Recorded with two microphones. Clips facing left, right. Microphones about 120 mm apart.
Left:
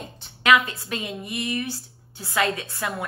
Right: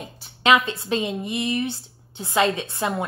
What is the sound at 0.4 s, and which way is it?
A woman's voice, 25° right (ahead or behind).